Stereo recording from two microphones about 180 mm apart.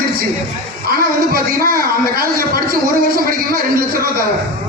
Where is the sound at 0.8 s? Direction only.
55° right (ahead or behind).